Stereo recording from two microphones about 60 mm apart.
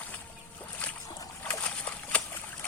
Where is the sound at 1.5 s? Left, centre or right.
Left.